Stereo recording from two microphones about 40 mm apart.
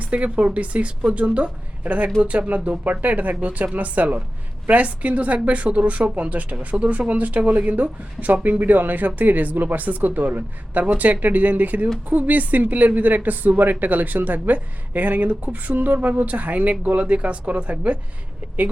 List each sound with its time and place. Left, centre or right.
0.1 s a woman's voice: right